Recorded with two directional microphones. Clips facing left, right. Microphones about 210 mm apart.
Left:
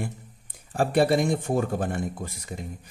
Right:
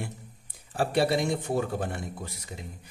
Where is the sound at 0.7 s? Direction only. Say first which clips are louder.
Left 4 dB; 50° left (ahead or behind).